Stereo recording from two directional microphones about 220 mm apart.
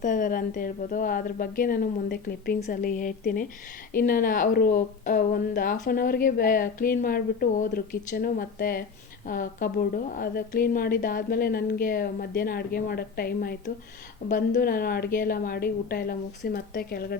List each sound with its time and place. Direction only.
0.0 s a woman's voice: 35° left (ahead or behind)